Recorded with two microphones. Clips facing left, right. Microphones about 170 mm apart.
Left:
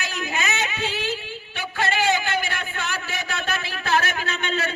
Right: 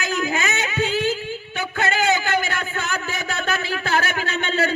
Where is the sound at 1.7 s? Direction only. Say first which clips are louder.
Right 1 dB; 50° right (ahead or behind).